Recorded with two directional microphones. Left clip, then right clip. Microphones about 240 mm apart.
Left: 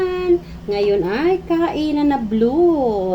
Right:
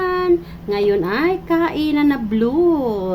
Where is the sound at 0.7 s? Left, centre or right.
Centre.